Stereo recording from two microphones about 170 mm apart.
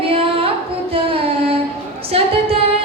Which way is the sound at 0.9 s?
35° right (ahead or behind).